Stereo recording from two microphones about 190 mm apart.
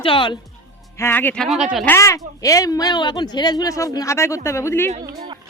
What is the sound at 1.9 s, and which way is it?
A woman's voice, 15° left (ahead or behind).